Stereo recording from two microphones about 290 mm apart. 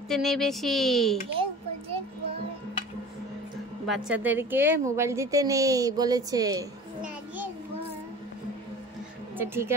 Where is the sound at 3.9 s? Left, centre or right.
Centre.